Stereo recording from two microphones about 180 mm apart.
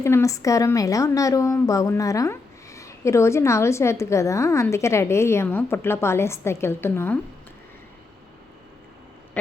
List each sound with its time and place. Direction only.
0.0 s a woman's voice: 15° left (ahead or behind)